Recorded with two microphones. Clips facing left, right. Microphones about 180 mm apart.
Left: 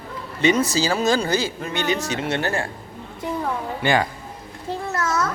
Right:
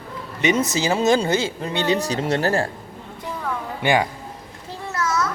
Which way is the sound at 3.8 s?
15° right (ahead or behind).